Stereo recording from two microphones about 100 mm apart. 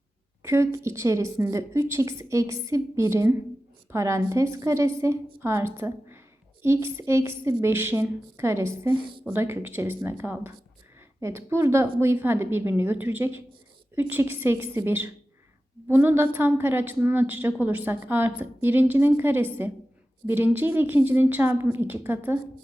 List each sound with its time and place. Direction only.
0.4 s a woman's voice: 25° right (ahead or behind)
9.0 s a woman's voice: 55° right (ahead or behind)
9.3 s a woman's voice: 20° right (ahead or behind)